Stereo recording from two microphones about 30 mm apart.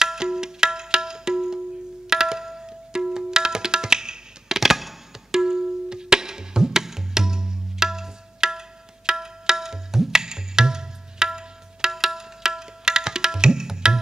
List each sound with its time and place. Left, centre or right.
0.0 s music: right
2.0 s tabla: centre
4.6 s music: centre
5.4 s music: centre
12.0 s tabla: centre